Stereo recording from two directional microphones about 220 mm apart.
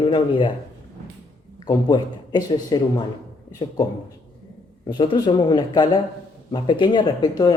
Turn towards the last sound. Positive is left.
turn(degrees=20)  # may be behind; listen again after turning